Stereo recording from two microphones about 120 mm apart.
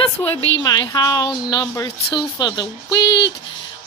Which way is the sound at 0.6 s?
35° left (ahead or behind).